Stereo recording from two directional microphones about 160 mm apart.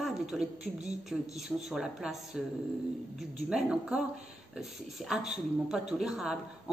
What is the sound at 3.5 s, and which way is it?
A man's voice, 5° right (ahead or behind).